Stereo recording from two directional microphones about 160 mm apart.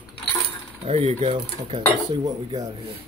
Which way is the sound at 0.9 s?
45° right (ahead or behind).